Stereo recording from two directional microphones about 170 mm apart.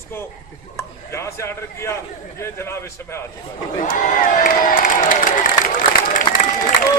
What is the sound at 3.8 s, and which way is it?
Speech, 50° left (ahead or behind).